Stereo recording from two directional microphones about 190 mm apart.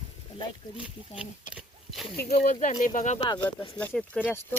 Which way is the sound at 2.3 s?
35° left (ahead or behind).